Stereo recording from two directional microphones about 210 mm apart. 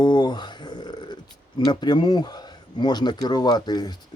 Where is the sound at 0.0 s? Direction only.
20° left (ahead or behind).